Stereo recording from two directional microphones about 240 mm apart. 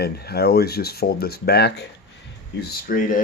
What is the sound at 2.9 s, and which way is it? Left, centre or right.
Speech, left.